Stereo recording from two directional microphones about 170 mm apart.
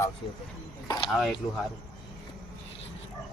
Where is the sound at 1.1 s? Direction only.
Centre (ahead or behind).